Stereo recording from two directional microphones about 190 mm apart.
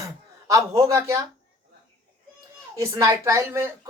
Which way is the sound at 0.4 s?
15° right (ahead or behind).